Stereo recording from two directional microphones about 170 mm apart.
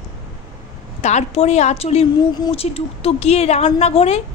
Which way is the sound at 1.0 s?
40° left (ahead or behind).